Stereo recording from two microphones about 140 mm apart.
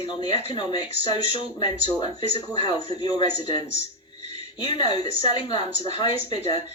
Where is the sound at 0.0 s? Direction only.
35° left (ahead or behind).